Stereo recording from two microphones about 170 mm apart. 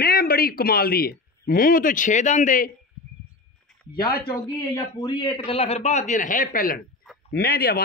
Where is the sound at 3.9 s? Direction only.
65° left (ahead or behind).